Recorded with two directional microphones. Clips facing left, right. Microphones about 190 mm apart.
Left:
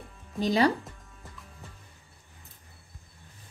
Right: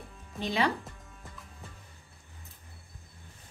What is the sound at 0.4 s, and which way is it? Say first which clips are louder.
Speech: left 6 dB; 40° left (ahead or behind).